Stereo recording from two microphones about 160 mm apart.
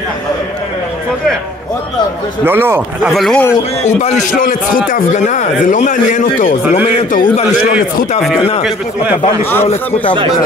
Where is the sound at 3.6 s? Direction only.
40° left (ahead or behind).